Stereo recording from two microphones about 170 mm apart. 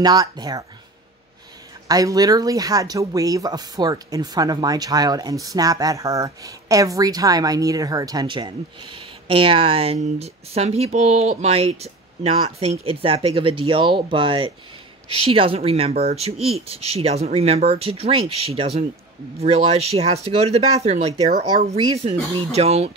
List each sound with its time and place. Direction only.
0.0 s speech: 25° right (ahead or behind)
1.9 s speech: 20° right (ahead or behind); by 22.8 s 40° right (ahead or behind)